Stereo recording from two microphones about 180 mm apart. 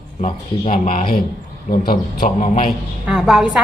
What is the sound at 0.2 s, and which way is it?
Speech, 40° left (ahead or behind).